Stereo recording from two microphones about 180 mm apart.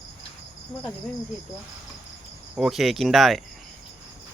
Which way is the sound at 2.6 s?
Centre (ahead or behind).